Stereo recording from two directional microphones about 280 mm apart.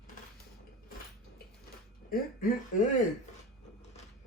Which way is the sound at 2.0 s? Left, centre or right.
Left.